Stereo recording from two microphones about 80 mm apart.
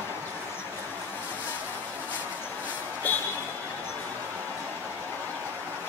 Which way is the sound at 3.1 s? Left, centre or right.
Left.